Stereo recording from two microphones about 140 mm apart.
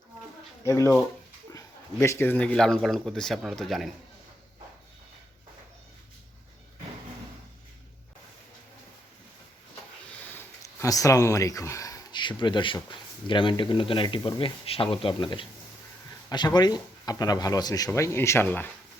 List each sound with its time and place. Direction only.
0.6 s speech: 20° left (ahead or behind); by 3.9 s centre (ahead or behind)
10.2 s a sound: 15° left (ahead or behind)
12.4 s speech: 35° left (ahead or behind); by 18.7 s 15° left (ahead or behind)